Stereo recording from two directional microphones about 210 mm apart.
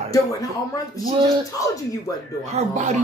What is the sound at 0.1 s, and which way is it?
Speech, 15° left (ahead or behind).